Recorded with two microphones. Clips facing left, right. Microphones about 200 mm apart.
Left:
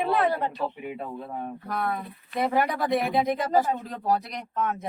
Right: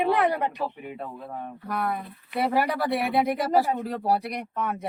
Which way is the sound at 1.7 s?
10° right (ahead or behind).